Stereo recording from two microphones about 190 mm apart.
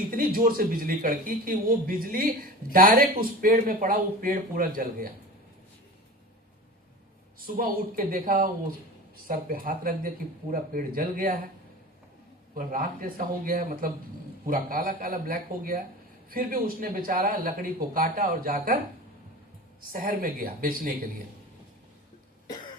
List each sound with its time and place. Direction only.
0.1 s a man's voice: 50° right (ahead or behind)
7.3 s a man's voice: 50° right (ahead or behind)
12.5 s a man's voice: 45° right (ahead or behind)
19.9 s a man's voice: 45° right (ahead or behind)